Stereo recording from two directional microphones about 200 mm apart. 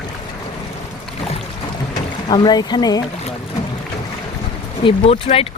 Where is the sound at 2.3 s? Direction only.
20° left (ahead or behind).